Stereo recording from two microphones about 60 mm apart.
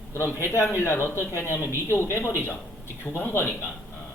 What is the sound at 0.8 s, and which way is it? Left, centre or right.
Speech, left.